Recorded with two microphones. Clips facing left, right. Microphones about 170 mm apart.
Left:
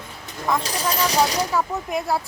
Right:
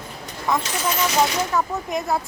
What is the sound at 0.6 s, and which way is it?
Speech, 35° left (ahead or behind).